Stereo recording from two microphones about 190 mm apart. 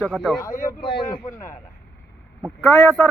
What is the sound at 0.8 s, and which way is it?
Speech, 25° left (ahead or behind).